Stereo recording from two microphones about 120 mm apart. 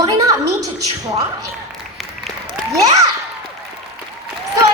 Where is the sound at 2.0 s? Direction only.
Centre (ahead or behind).